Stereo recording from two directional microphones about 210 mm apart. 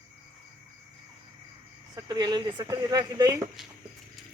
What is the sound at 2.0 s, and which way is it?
Speech, 20° right (ahead or behind).